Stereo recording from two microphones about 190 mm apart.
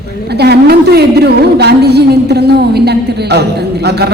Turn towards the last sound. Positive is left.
turn(degrees=-60)  # may be behind; listen again after turning